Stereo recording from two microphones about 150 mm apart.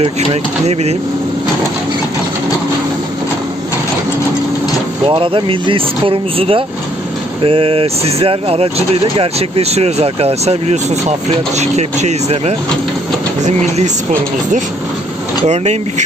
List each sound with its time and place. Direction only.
0.7 s speech: 45° right (ahead or behind)
5.0 s speech: 35° right (ahead or behind)